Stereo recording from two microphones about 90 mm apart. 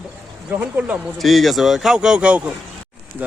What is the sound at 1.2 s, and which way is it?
A man's voice, centre (ahead or behind).